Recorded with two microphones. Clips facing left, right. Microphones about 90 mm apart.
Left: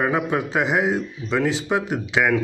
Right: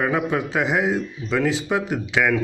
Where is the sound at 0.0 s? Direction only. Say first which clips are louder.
Even; 10° left (ahead or behind).